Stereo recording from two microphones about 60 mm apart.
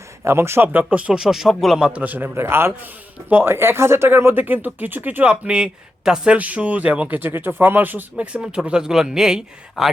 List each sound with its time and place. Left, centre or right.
0.3 s a man's voice: right
0.7 s speech: right
1.2 s speech: centre
1.9 s speech: right
2.3 s a man's voice: right
5.3 s speech: centre
6.3 s speech: right
7.2 s speech: right
8.1 s speech: centre